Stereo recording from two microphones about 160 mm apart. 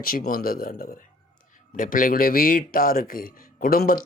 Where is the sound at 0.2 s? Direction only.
60° left (ahead or behind).